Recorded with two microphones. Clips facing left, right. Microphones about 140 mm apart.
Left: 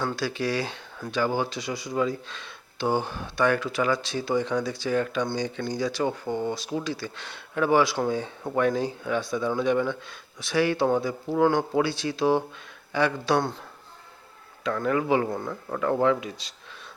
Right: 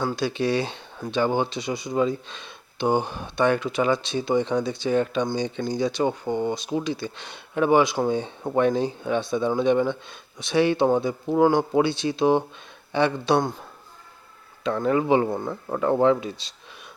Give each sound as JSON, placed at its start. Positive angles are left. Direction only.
{"t": 0.0, "sound": "speech", "side_deg": -20}
{"t": 14.6, "sound": "speech", "side_deg": -25}